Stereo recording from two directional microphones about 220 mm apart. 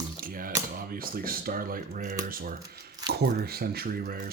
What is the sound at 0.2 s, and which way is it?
Tap, 40° right (ahead or behind).